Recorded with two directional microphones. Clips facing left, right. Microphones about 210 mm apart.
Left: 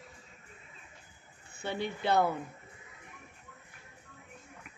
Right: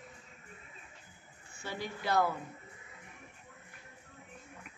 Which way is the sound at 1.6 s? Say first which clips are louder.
Left 5 dB; 25° left (ahead or behind).